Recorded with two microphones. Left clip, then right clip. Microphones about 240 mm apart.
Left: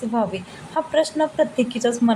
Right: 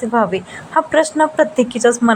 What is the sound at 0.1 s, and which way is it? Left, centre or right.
A woman's voice, centre.